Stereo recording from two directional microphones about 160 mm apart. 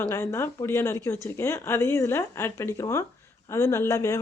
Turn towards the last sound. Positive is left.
turn(degrees=20)  # may be behind; listen again after turning